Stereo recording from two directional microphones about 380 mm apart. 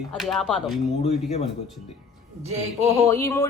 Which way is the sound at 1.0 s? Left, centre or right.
Centre.